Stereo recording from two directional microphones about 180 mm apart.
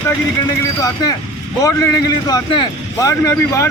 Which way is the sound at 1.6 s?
15° left (ahead or behind).